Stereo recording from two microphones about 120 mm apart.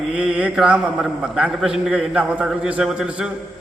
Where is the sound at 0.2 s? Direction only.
10° right (ahead or behind).